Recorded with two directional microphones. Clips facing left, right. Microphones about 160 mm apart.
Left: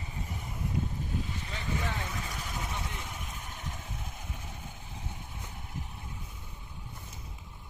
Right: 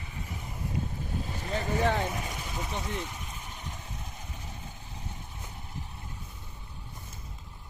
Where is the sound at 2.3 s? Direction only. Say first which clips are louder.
Right 2 dB; 15° right (ahead or behind).